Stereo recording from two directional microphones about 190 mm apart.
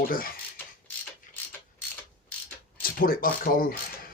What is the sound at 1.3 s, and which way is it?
Mechanisms, 45° left (ahead or behind).